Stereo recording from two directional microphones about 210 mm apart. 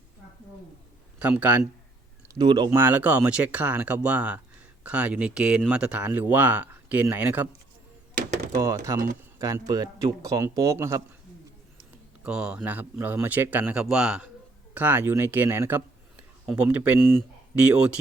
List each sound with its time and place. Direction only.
1.2 s speech: 5° right (ahead or behind)
2.2 s speech: 20° right (ahead or behind)
2.6 s speech: 10° right (ahead or behind)
8.5 s speech: 15° right (ahead or behind)
12.2 s speech: 5° right (ahead or behind)